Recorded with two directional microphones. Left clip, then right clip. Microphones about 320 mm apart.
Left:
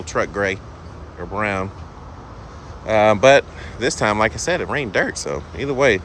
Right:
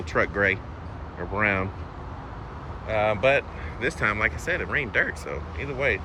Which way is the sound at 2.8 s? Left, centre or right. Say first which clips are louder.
Left 9 dB; centre.